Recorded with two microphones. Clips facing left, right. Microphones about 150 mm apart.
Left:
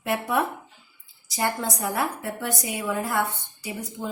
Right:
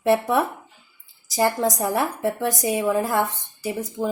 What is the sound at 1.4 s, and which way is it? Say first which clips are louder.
A woman's voice: right 6 dB; 30° right (ahead or behind).